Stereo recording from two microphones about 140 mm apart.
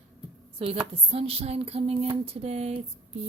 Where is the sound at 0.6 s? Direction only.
45° right (ahead or behind).